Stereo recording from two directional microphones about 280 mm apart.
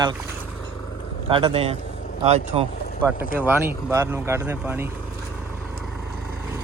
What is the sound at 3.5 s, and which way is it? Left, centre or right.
Speech, centre.